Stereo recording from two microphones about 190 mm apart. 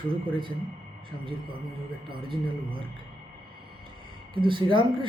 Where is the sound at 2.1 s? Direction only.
25° right (ahead or behind).